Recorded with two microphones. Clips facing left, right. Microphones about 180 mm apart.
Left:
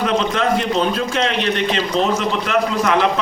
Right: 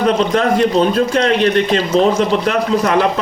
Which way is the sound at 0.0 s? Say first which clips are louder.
Right 4 dB; 40° right (ahead or behind).